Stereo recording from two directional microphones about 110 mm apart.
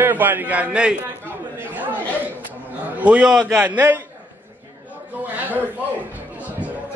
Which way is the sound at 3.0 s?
10° right (ahead or behind).